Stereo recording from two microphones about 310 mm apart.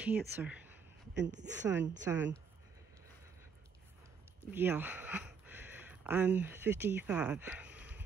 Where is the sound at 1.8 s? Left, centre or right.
Centre.